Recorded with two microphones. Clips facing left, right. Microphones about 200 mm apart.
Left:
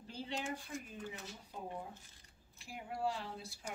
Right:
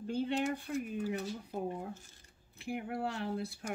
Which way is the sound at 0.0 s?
60° right (ahead or behind).